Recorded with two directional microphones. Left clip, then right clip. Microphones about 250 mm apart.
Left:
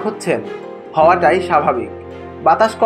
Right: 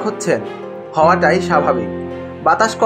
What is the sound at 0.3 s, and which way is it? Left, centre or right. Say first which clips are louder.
Speech: right 1 dB; centre.